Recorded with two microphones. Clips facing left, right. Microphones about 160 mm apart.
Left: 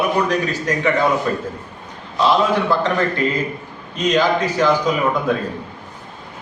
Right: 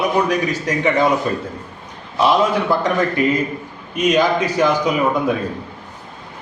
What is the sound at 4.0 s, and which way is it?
Speech, 15° right (ahead or behind).